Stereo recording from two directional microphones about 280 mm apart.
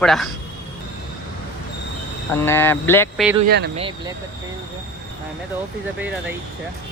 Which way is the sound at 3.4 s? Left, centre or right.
Right.